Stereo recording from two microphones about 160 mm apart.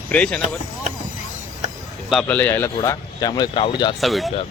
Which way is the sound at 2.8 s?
25° left (ahead or behind).